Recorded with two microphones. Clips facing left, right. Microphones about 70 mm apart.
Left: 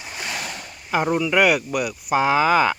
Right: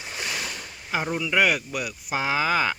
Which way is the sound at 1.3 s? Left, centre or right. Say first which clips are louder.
Left 2 dB; left.